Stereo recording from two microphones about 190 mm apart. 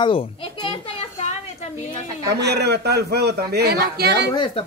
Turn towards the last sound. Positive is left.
turn(degrees=25)  # may be behind; listen again after turning